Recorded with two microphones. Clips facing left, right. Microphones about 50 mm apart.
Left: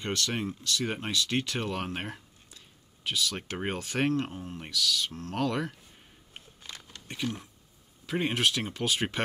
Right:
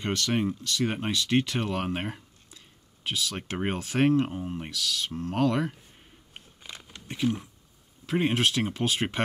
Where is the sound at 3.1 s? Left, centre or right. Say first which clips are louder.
Even; right.